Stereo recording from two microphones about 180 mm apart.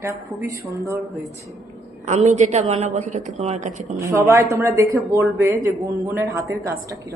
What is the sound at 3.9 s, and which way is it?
A woman's voice, 15° right (ahead or behind).